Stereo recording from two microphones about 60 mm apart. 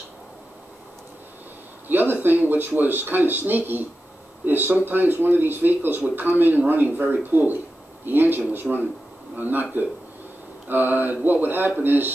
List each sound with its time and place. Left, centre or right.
1.9 s a man's voice: right